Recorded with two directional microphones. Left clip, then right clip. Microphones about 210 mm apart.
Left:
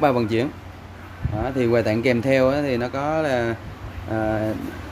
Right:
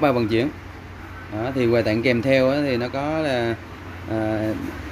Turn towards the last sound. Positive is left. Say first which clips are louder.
# even
turn(degrees=5)  # may be behind; listen again after turning